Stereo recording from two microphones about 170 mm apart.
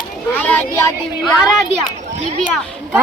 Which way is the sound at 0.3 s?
10° left (ahead or behind).